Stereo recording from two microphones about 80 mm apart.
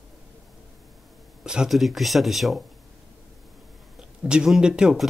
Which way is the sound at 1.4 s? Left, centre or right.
Centre.